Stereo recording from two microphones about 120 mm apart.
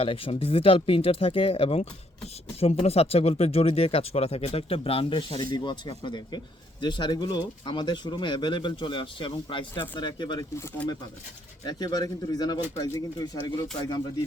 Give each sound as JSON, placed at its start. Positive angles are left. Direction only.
{"t": 0.0, "sound": "speech", "side_deg": 55}
{"t": 10.8, "sound": "speech", "side_deg": 10}
{"t": 11.6, "sound": "speech", "side_deg": 35}